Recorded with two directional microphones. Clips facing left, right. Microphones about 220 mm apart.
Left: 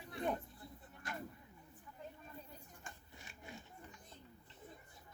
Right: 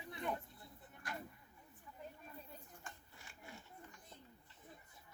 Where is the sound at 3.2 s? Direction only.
20° left (ahead or behind).